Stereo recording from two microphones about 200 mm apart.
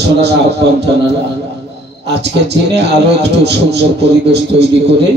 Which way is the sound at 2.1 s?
55° right (ahead or behind).